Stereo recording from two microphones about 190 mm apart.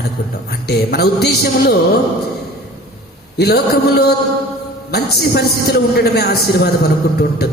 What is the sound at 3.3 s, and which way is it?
A man's voice, 55° left (ahead or behind).